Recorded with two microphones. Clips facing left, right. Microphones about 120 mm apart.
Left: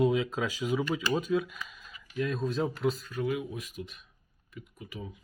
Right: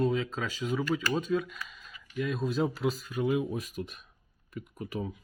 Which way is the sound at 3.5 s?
40° right (ahead or behind).